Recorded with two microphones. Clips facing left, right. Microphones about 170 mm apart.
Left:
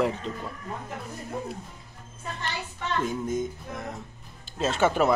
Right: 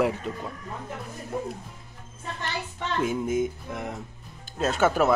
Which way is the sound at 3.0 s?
5° right (ahead or behind).